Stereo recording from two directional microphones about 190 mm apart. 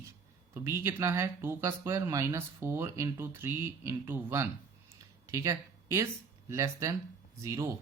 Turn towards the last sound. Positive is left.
turn(degrees=-15)  # may be behind; listen again after turning